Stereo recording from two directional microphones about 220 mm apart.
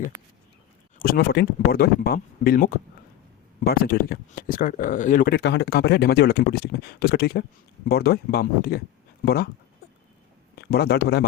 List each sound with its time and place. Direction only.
0.9 s speech: 45° left (ahead or behind)
10.5 s speech: 45° left (ahead or behind)